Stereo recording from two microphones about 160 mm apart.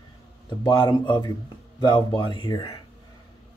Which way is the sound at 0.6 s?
30° left (ahead or behind).